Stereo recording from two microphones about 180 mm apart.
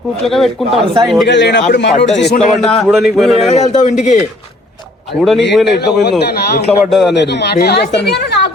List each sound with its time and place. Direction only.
0.3 s speech: centre (ahead or behind)
1.3 s speech: 80° left
2.1 s a man's voice: 65° left (ahead or behind)
2.5 s speech: centre (ahead or behind)
3.4 s speech: 40° left (ahead or behind)
5.1 s a man's voice: 60° left (ahead or behind)
5.6 s speech: 70° left (ahead or behind)
6.7 s speech: centre (ahead or behind)
7.1 s speech: 75° left (ahead or behind)